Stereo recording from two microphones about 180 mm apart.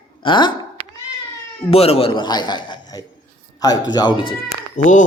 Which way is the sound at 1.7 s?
35° left (ahead or behind).